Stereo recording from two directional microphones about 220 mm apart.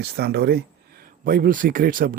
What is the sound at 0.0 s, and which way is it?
Speech, 50° right (ahead or behind).